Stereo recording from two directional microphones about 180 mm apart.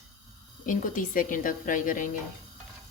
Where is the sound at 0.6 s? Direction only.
45° left (ahead or behind).